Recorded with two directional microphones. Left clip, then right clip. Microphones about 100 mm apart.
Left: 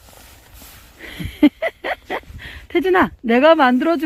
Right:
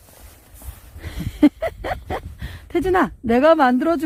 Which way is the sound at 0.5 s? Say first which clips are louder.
Left 3 dB; centre (ahead or behind).